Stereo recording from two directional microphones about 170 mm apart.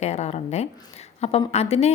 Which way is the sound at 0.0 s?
40° left (ahead or behind).